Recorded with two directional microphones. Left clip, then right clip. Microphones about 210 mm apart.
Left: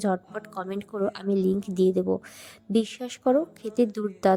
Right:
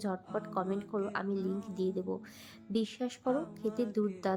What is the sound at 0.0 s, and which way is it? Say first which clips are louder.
A woman's voice: left 8 dB; 35° left (ahead or behind).